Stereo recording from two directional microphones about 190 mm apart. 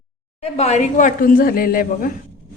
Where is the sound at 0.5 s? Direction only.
35° left (ahead or behind).